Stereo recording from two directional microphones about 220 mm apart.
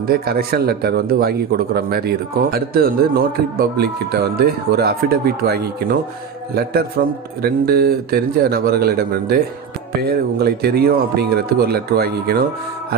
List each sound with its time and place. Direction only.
0.1 s a man's voice: 45° right (ahead or behind)